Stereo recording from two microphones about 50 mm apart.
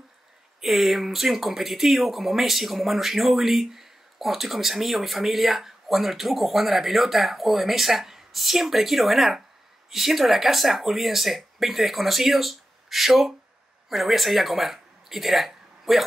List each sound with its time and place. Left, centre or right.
0.6 s speech: centre